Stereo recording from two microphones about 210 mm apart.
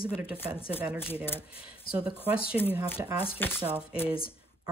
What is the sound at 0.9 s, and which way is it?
Speech, 10° left (ahead or behind).